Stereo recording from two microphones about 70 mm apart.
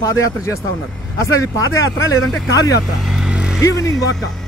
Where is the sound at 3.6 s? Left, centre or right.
Left.